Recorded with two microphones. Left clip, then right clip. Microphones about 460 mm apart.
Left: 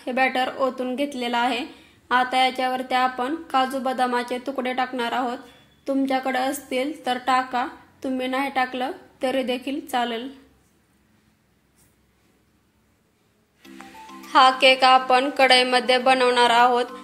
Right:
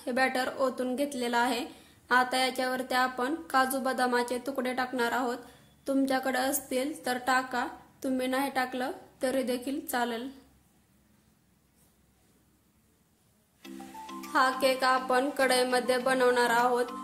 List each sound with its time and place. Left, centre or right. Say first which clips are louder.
0.0 s speech: left 6 dB; right
13.6 s music: left 2 dB; centre
14.3 s speech: left 11 dB; right